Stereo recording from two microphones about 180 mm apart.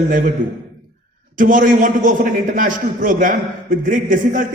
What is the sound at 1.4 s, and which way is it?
A man's voice, 50° right (ahead or behind).